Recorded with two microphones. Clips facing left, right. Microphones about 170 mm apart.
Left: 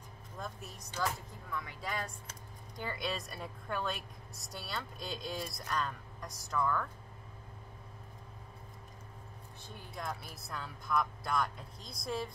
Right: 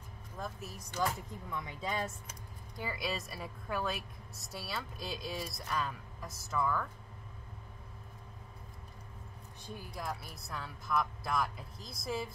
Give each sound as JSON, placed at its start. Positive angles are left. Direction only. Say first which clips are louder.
{"t": 0.4, "sound": "a woman's voice", "louder": "right 2 dB", "side_deg": -5}
{"t": 1.5, "sound": "speech", "louder": "right 1 dB", "side_deg": -20}
{"t": 2.8, "sound": "a woman's voice", "louder": "even", "side_deg": -5}
{"t": 9.9, "sound": "a woman's voice", "louder": "left 1 dB", "side_deg": 0}